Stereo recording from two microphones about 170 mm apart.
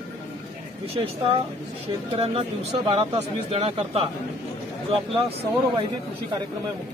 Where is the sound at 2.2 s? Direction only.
35° right (ahead or behind).